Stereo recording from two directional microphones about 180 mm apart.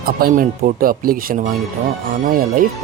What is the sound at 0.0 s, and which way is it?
A man's voice, 55° right (ahead or behind).